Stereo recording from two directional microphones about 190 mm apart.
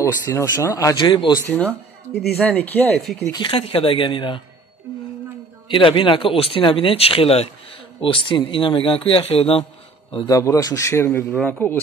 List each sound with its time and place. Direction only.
0.0 s speech: 15° left (ahead or behind)
1.5 s a man's voice: 10° left (ahead or behind)
3.2 s a man's voice: 15° left (ahead or behind)
3.4 s speech: 30° left (ahead or behind)
5.7 s speech: 25° left (ahead or behind)
10.1 s a man's voice: 20° left (ahead or behind)